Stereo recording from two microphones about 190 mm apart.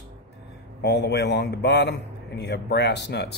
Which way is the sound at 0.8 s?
60° left (ahead or behind).